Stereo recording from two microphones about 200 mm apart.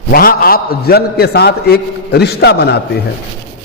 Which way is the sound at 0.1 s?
45° left (ahead or behind).